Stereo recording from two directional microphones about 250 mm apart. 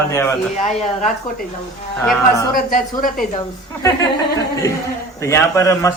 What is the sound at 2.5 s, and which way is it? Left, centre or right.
Speech, left.